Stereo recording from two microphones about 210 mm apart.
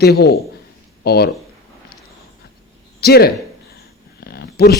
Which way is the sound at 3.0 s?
50° left (ahead or behind).